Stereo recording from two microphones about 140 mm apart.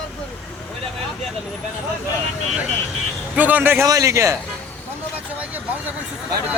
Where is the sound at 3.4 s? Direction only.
10° right (ahead or behind).